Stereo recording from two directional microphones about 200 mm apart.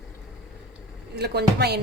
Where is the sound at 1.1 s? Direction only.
55° right (ahead or behind).